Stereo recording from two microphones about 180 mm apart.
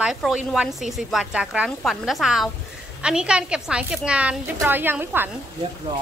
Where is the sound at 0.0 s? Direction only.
Centre (ahead or behind).